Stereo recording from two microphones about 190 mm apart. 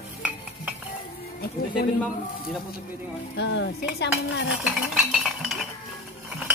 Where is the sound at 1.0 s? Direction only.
55° left (ahead or behind).